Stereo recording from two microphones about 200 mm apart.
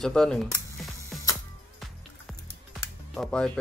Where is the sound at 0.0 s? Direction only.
5° left (ahead or behind).